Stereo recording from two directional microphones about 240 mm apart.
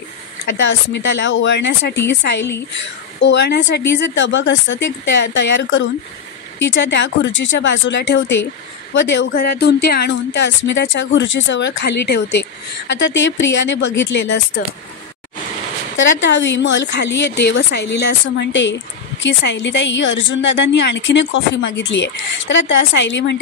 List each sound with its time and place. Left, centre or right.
0.6 s a woman's voice: left
3.2 s a woman's voice: left
16.0 s a woman's voice: left